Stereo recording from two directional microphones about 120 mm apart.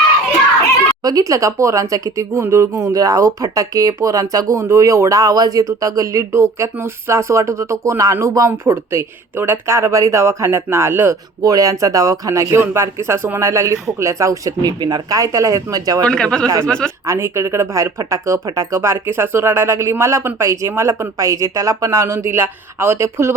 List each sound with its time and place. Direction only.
1.0 s speech: 30° right (ahead or behind)
11.4 s speech: 30° right (ahead or behind)
16.0 s speech: 5° left (ahead or behind)
17.1 s speech: 20° right (ahead or behind)